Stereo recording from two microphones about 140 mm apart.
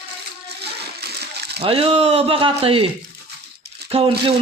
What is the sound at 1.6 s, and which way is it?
Speech, 45° right (ahead or behind).